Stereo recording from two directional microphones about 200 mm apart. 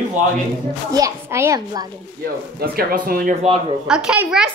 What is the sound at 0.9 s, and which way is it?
A child's voice, 15° right (ahead or behind).